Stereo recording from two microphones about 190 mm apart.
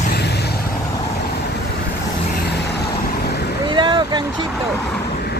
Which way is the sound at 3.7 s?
25° right (ahead or behind).